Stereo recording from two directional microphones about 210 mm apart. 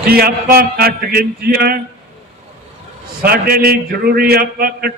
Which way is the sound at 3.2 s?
45° right (ahead or behind).